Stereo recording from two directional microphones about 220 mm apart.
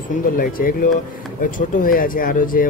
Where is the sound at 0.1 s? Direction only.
40° left (ahead or behind).